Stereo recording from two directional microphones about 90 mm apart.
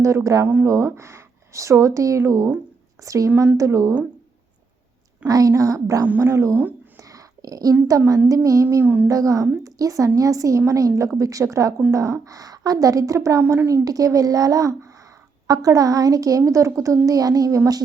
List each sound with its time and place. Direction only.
0.0 s speech: 35° right (ahead or behind)
5.2 s speech: 40° right (ahead or behind)
6.6 s a sound: 20° right (ahead or behind)
7.0 s whispering: 40° right (ahead or behind)
7.9 s speech: 40° right (ahead or behind)
8.8 s a woman's voice: 20° right (ahead or behind)
9.0 s a woman's voice: 40° right (ahead or behind)
13.4 s a woman's voice: 25° right (ahead or behind)
13.8 s speech: 40° right (ahead or behind)